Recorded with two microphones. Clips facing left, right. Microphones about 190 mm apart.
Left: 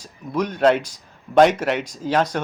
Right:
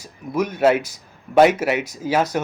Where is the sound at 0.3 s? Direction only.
5° right (ahead or behind).